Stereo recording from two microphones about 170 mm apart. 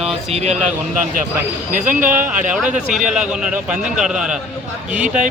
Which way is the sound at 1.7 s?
50° right (ahead or behind).